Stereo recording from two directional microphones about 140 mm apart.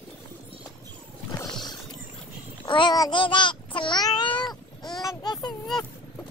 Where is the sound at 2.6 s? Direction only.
35° left (ahead or behind).